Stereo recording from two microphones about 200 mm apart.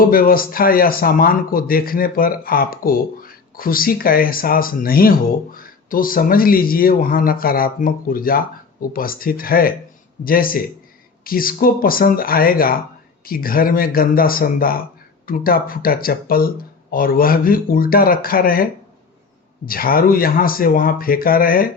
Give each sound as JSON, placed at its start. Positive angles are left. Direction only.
{"t": 0.0, "sound": "a man's voice", "side_deg": 45}